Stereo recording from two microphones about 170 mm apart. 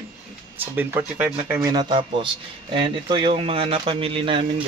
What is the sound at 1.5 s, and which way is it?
Speech, 25° right (ahead or behind).